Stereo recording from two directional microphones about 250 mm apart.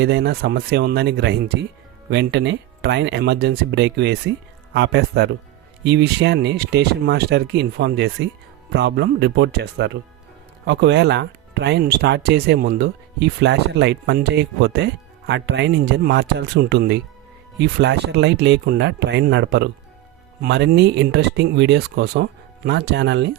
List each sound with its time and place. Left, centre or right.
0.0 s speech: right